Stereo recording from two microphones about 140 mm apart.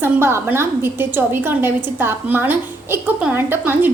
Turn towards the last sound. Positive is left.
turn(degrees=-15)  # may be behind; listen again after turning